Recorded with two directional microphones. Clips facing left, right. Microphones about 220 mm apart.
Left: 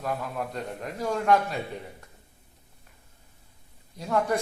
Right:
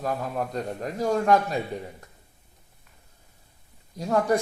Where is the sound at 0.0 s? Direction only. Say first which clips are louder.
Right 3 dB; 40° right (ahead or behind).